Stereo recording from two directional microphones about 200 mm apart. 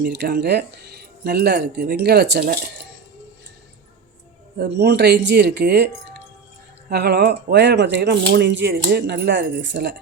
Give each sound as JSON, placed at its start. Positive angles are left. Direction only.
{"t": 0.0, "sound": "speech", "side_deg": -55}
{"t": 4.5, "sound": "speech", "side_deg": -55}
{"t": 6.9, "sound": "speech", "side_deg": -55}